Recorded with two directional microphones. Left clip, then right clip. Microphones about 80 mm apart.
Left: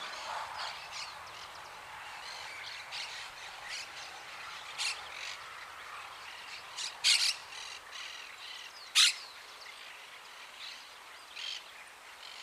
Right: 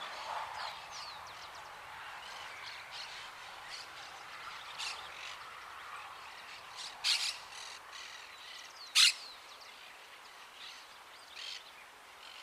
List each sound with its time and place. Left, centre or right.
0.3 s a sound: right
2.6 s a sound: left
6.5 s cricket: left
7.0 s mechanisms: left
7.5 s squawk: centre
8.9 s bird: centre
11.3 s bird: centre